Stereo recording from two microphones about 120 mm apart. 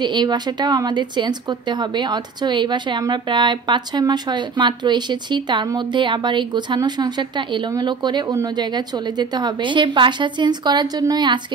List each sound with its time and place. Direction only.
0.0 s speech: 40° right (ahead or behind)